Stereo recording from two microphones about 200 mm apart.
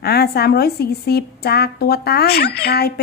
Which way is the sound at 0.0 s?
50° left (ahead or behind).